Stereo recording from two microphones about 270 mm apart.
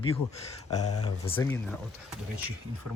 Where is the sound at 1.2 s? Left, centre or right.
Centre.